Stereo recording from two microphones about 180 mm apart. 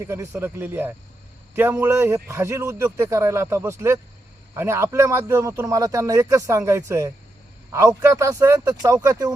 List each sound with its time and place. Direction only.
0.0 s a man's voice: 15° right (ahead or behind)